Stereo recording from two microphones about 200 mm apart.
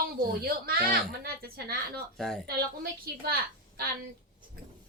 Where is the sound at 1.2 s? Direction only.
50° right (ahead or behind).